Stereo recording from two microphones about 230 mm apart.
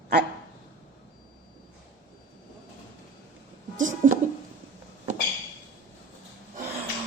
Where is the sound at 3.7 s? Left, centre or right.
Right.